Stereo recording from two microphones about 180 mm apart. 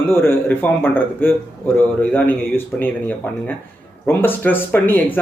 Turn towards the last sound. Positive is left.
turn(degrees=10)  # may be behind; listen again after turning